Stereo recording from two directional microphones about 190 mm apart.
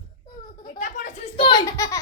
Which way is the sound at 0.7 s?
40° left (ahead or behind).